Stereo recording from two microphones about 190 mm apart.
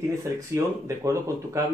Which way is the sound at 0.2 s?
15° right (ahead or behind).